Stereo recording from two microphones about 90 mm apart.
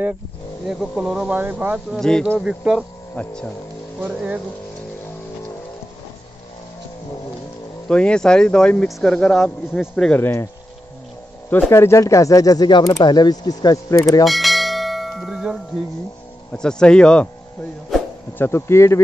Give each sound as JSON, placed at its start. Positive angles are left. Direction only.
{"t": 0.7, "sound": "speech", "side_deg": -5}
{"t": 1.3, "sound": "speech", "side_deg": -20}
{"t": 2.0, "sound": "speech", "side_deg": 5}
{"t": 2.4, "sound": "speech", "side_deg": -10}
{"t": 3.2, "sound": "speech", "side_deg": 15}
{"t": 7.9, "sound": "speech", "side_deg": 10}
{"t": 10.1, "sound": "speech", "side_deg": 25}
{"t": 11.7, "sound": "speech", "side_deg": 30}
{"t": 13.0, "sound": "speech", "side_deg": 50}
{"t": 14.2, "sound": "bell", "side_deg": 0}
{"t": 16.5, "sound": "speech", "side_deg": 10}
{"t": 17.9, "sound": "a sound", "side_deg": 0}
{"t": 18.4, "sound": "speech", "side_deg": 30}